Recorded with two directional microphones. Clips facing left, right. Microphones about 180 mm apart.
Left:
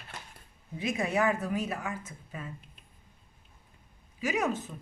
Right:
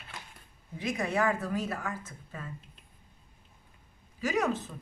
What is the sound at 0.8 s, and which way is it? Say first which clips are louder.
A woman's voice: left 1 dB; 20° left (ahead or behind).